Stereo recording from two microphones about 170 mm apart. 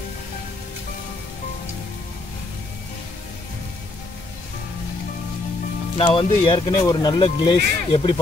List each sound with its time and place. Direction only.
6.1 s speech: 30° left (ahead or behind)